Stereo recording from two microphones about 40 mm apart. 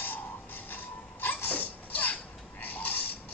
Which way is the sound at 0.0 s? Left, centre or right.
Left.